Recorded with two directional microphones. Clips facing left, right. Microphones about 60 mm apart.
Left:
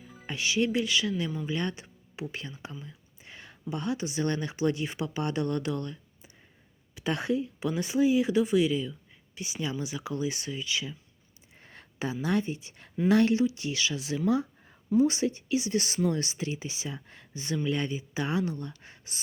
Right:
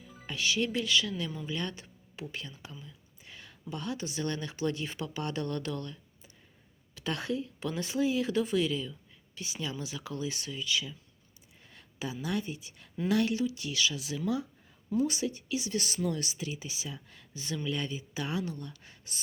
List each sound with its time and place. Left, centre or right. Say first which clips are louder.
0.3 s speech: left 3 dB; left
11.5 s speech: left 4 dB; left
14.3 s a sound: left 6 dB; left
14.9 s speech: left 6 dB; left